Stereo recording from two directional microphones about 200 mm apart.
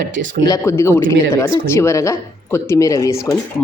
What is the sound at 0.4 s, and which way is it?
Speech, 15° left (ahead or behind).